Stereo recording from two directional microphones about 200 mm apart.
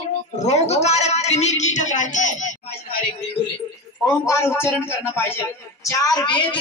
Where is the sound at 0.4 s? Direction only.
35° left (ahead or behind).